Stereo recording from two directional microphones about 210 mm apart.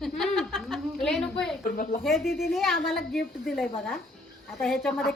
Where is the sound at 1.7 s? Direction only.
40° left (ahead or behind).